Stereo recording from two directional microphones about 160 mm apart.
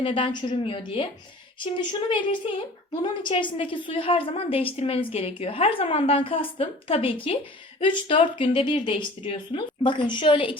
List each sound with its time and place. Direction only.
0.0 s a woman's voice: 30° left (ahead or behind)